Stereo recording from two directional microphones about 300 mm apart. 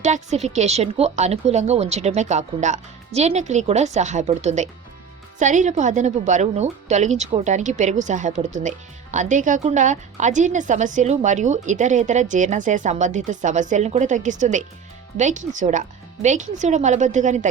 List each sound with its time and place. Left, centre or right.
0.0 s a woman's voice: right